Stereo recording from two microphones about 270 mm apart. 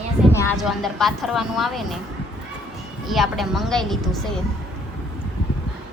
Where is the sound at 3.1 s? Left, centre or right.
Centre.